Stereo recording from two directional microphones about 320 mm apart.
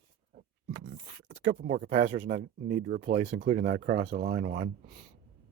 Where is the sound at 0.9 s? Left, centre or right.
Right.